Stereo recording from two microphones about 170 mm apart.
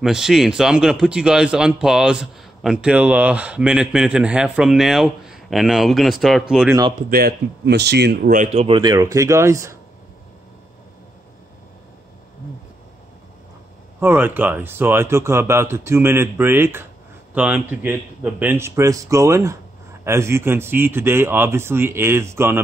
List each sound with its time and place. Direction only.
0.0 s a man's voice: 5° right (ahead or behind)
7.1 s speech: 65° right (ahead or behind)
8.3 s speech: 45° right (ahead or behind); by 9.8 s 15° right (ahead or behind)
13.9 s speech: 10° right (ahead or behind)